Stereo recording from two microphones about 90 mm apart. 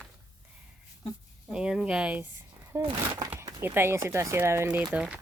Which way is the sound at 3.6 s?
25° right (ahead or behind).